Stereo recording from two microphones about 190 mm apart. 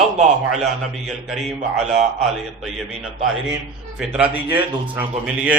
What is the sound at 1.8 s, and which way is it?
Speech, 35° right (ahead or behind).